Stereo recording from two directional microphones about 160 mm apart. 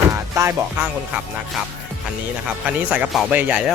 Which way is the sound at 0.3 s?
15° right (ahead or behind).